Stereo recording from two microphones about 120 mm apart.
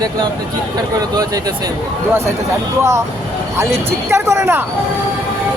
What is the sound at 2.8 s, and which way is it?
Speech, 25° right (ahead or behind).